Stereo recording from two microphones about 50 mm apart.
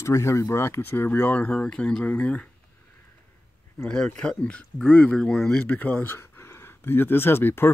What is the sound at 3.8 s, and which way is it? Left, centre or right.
Speech, centre.